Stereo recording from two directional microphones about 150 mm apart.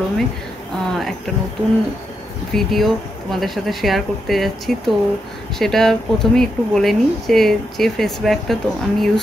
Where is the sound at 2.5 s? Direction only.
Centre (ahead or behind).